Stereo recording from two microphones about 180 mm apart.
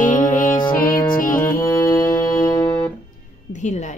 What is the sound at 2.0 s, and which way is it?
Music, 15° left (ahead or behind).